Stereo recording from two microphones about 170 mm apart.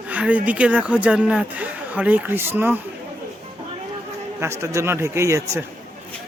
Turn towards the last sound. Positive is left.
turn(degrees=-15)  # may be behind; listen again after turning